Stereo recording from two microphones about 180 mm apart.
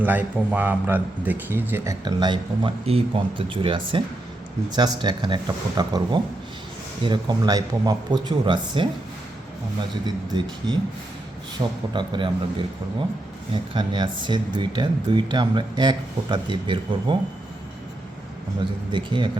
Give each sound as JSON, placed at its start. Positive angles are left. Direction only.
{"t": 0.0, "sound": "a man's voice", "side_deg": -10}
{"t": 11.6, "sound": "speech", "side_deg": -25}
{"t": 13.7, "sound": "speech", "side_deg": -25}
{"t": 18.9, "sound": "speech", "side_deg": -25}